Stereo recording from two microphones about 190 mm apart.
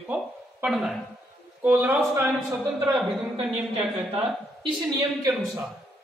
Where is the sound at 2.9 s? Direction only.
30° right (ahead or behind).